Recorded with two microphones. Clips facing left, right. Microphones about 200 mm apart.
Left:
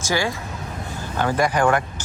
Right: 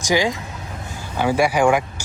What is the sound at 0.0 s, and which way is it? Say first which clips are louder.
Speech: right 4 dB; 15° right (ahead or behind).